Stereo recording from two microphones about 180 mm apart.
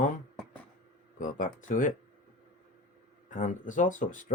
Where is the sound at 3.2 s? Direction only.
45° left (ahead or behind).